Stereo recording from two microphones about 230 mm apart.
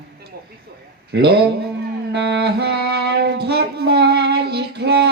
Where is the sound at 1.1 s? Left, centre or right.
Right.